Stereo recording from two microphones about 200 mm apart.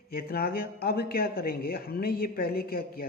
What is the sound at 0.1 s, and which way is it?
Speech, 50° left (ahead or behind).